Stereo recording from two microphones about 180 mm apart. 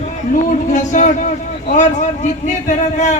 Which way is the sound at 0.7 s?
45° left (ahead or behind).